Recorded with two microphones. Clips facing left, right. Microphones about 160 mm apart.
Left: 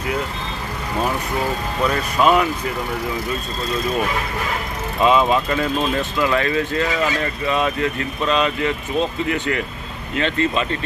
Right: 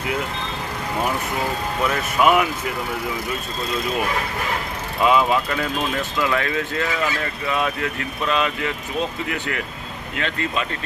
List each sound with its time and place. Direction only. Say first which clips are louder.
2.2 s speech: left 1 dB; 15° right (ahead or behind)
5.0 s speech: left 2 dB; 25° left (ahead or behind)
10.2 s speech: left 6 dB; 25° left (ahead or behind)